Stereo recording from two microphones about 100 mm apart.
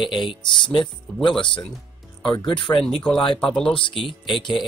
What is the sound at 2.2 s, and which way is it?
Speech, 55° left (ahead or behind).